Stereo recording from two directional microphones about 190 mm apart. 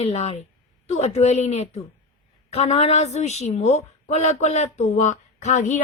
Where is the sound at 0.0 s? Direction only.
35° left (ahead or behind).